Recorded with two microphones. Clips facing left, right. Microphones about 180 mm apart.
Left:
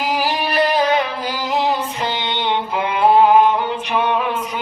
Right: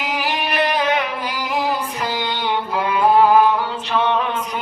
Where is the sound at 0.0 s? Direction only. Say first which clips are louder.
Left 3 dB; 35° left (ahead or behind); by 4.2 s 15° left (ahead or behind).